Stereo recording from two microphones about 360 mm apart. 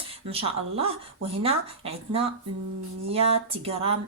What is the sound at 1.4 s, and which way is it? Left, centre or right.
Speech, centre.